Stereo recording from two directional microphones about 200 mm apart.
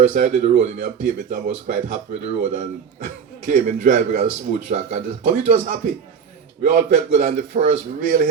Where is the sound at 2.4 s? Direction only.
35° right (ahead or behind).